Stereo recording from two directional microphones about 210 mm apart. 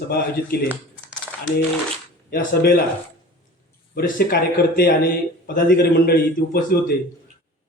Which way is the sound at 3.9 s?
45° left (ahead or behind).